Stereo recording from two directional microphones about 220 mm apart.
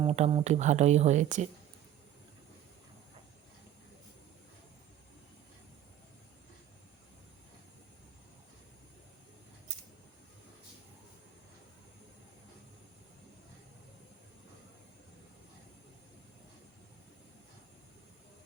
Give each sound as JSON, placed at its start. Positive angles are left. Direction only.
{"t": 0.0, "sound": "speech", "side_deg": -25}